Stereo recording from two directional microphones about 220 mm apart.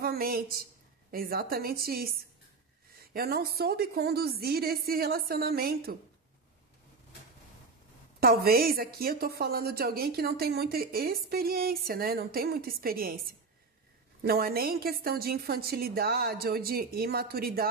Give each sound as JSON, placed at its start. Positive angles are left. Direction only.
{"t": 0.0, "sound": "a woman's voice", "side_deg": -45}
{"t": 8.2, "sound": "a woman's voice", "side_deg": -45}